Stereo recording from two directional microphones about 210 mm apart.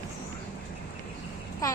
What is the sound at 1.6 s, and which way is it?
Speech, 15° left (ahead or behind).